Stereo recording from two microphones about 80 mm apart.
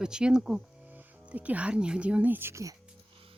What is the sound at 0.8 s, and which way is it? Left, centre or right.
Speech, centre.